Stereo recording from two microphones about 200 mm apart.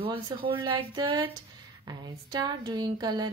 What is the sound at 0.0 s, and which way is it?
Speech, 25° right (ahead or behind).